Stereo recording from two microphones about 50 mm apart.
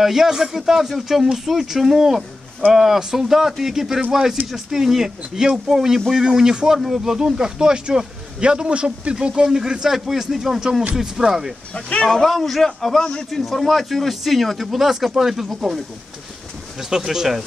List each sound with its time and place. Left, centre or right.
0.0 s speech: centre
11.7 s speech: left
12.1 s a man's voice: centre
13.3 s speech: centre
16.9 s speech: centre